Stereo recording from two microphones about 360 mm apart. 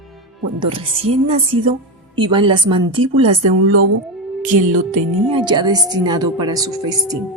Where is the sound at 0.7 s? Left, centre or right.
Centre.